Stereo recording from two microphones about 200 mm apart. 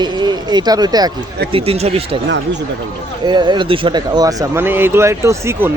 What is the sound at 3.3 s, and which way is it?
Speech, 20° right (ahead or behind).